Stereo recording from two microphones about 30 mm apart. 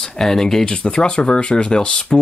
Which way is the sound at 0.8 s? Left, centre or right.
Left.